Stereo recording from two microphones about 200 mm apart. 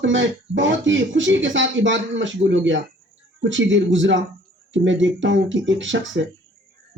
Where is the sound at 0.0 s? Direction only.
70° right (ahead or behind).